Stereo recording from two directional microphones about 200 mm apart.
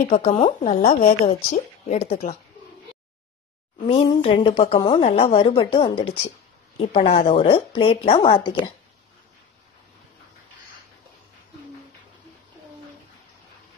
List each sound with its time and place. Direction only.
0.1 s a woman's voice: 35° left (ahead or behind)
3.8 s a woman's voice: 30° left (ahead or behind)